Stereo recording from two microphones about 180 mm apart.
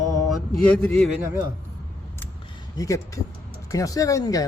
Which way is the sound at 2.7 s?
20° left (ahead or behind).